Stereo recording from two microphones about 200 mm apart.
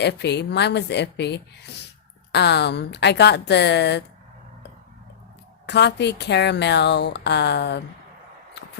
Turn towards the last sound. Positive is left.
turn(degrees=60)  # may be behind; listen again after turning